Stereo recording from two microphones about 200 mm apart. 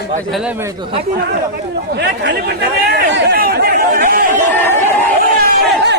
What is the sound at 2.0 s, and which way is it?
Speech, 60° right (ahead or behind).